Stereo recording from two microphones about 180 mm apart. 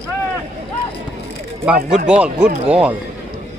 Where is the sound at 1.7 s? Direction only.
5° right (ahead or behind).